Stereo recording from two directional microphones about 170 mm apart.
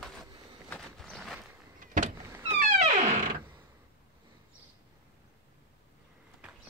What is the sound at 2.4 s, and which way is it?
Music, 45° right (ahead or behind).